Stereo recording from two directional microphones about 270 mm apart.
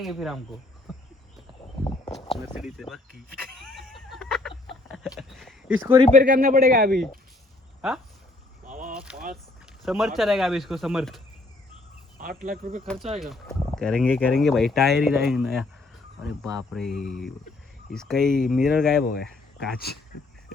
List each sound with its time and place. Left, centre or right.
0.0 s speech: centre
0.9 s a sound: centre
1.8 s a sound: left
2.6 s speech: centre
3.6 s a sound: centre
6.1 s a man's voice: right
7.8 s speech: centre
8.6 s a sound: right
9.8 s speech: centre
12.2 s a man's voice: right
13.1 s speech: centre
19.0 s speech: left